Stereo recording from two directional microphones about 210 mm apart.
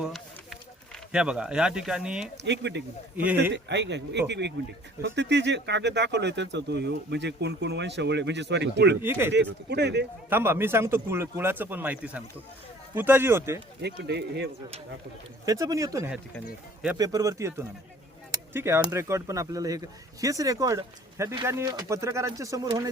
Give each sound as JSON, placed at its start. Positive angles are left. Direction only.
{"t": 0.0, "sound": "a sound", "side_deg": 0}
{"t": 2.4, "sound": "speech", "side_deg": -55}
{"t": 9.0, "sound": "speech", "side_deg": -10}
{"t": 9.3, "sound": "speech", "side_deg": -55}
{"t": 10.2, "sound": "speech", "side_deg": -10}
{"t": 13.8, "sound": "speech", "side_deg": -55}
{"t": 15.4, "sound": "speech", "side_deg": -15}